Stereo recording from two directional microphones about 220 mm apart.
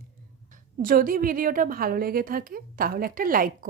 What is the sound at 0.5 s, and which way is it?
A woman's voice, 40° right (ahead or behind).